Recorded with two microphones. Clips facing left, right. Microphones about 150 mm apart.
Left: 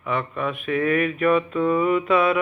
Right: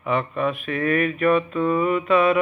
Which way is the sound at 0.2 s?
Centre (ahead or behind).